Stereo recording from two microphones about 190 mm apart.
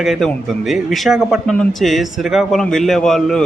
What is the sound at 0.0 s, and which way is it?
A man's voice, centre (ahead or behind).